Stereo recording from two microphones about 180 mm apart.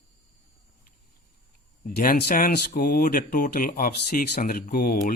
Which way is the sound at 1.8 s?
50° left (ahead or behind).